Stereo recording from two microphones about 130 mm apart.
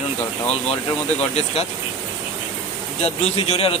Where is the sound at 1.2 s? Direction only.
55° left (ahead or behind).